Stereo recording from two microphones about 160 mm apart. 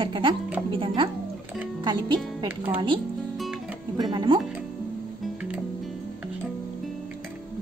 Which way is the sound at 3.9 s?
25° right (ahead or behind).